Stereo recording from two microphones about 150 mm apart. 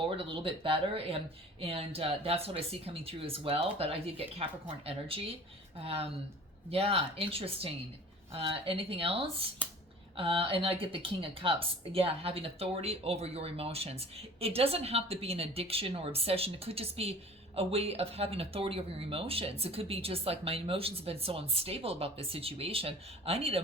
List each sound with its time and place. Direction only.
0.0 s speech: 35° right (ahead or behind)